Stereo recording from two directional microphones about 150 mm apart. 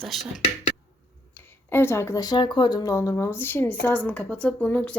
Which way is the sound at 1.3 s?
15° left (ahead or behind).